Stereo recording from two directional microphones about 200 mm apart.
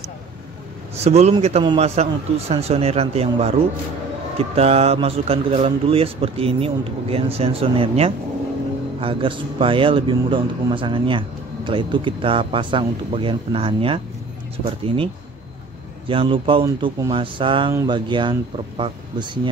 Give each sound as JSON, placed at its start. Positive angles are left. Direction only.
{"t": 0.9, "sound": "a man's voice", "side_deg": -30}
{"t": 16.1, "sound": "a man's voice", "side_deg": -25}